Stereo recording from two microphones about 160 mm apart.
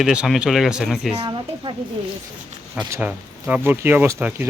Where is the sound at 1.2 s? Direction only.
30° right (ahead or behind).